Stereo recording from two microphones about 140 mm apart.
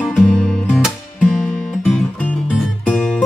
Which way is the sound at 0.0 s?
5° right (ahead or behind).